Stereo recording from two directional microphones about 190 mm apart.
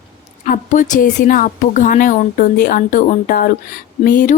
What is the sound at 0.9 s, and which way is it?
Speech, 45° left (ahead or behind).